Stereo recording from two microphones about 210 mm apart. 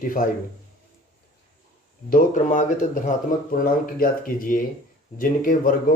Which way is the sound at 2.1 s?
40° left (ahead or behind).